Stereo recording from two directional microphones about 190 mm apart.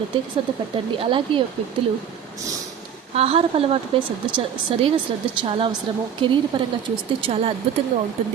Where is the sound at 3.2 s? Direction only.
30° right (ahead or behind).